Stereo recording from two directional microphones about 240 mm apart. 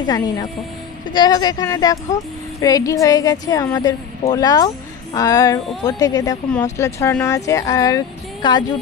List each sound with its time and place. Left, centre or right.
0.0 s speech: centre